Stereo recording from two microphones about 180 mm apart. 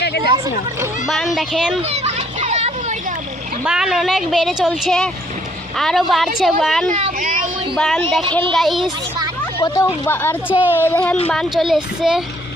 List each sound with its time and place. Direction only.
0.0 s a sound: 65° left (ahead or behind)
1.0 s speech: centre (ahead or behind)
1.8 s children playing: 35° right (ahead or behind)
3.6 s speech: 5° right (ahead or behind)
6.9 s a sound: 45° right (ahead or behind)
7.8 s speech: centre (ahead or behind)
9.6 s speech: 15° left (ahead or behind)
10.5 s speech: 10° right (ahead or behind)
10.8 s speech: 10° left (ahead or behind)